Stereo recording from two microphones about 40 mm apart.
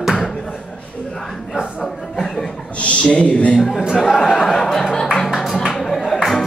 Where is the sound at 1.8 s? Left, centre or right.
Centre.